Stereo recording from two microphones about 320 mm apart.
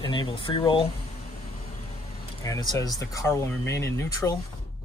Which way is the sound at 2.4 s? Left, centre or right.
Centre.